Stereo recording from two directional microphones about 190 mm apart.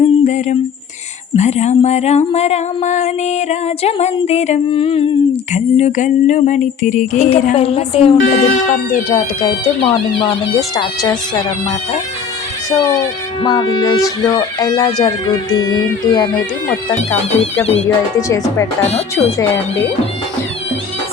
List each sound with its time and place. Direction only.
0.0 s a sound: 40° left (ahead or behind)
1.4 s speech: 35° left (ahead or behind)
13.4 s speech: 25° left (ahead or behind)
16.6 s speech: 5° left (ahead or behind)
17.4 s speech: 35° left (ahead or behind)
17.8 s speech: 15° left (ahead or behind)